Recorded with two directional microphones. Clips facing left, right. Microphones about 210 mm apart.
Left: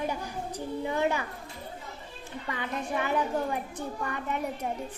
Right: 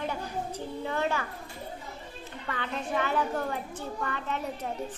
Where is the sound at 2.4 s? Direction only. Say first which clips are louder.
Even; 10° left (ahead or behind).